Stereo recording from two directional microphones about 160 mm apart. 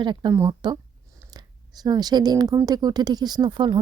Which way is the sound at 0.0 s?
30° right (ahead or behind).